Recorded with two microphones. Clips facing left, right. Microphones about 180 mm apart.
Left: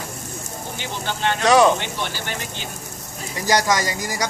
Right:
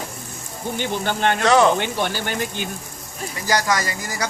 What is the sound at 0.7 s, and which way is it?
Speech, 50° right (ahead or behind).